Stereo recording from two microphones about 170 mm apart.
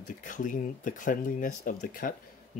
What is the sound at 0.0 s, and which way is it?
Speech, 50° left (ahead or behind).